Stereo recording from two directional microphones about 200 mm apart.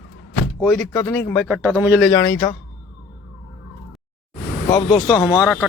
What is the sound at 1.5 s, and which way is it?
Speech, 10° right (ahead or behind).